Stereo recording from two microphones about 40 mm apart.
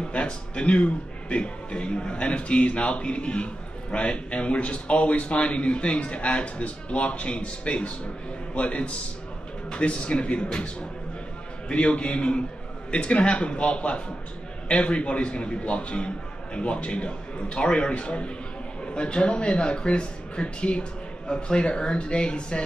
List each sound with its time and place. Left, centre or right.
0.1 s speech: left
11.7 s speech: left